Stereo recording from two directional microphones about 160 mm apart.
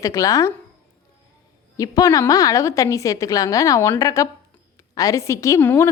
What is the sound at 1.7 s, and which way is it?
A woman's voice, 20° left (ahead or behind).